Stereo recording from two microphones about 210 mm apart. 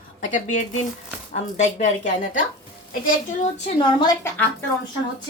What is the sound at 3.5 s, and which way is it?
Speech, 25° left (ahead or behind).